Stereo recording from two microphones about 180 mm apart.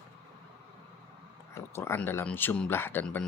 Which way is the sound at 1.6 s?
15° left (ahead or behind).